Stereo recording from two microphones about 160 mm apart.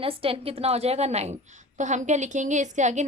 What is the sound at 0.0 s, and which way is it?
A woman's voice, 35° right (ahead or behind).